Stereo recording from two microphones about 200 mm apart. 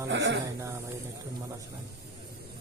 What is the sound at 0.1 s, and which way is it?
Speech, 60° right (ahead or behind).